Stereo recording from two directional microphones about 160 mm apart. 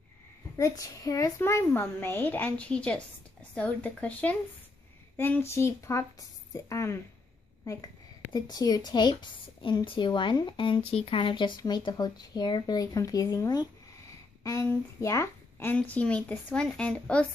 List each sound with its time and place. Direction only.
0.6 s a woman's voice: 20° left (ahead or behind)